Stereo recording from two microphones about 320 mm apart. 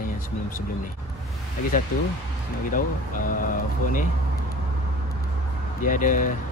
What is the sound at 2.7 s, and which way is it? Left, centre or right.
Speech, left.